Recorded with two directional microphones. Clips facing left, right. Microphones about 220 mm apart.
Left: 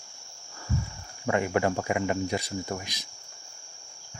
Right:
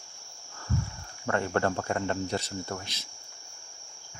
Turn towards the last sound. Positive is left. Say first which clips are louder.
# left 3 dB
turn(degrees=15)  # may be behind; listen again after turning